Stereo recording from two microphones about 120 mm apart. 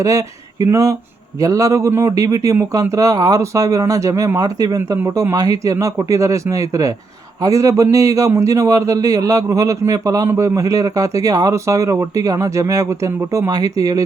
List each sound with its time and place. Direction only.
0.0 s a man's voice: 25° right (ahead or behind)